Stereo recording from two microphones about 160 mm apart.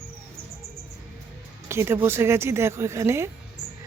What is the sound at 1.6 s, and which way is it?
Speech, 15° right (ahead or behind).